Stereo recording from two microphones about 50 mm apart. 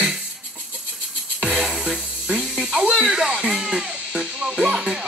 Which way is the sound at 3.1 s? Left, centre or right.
Centre.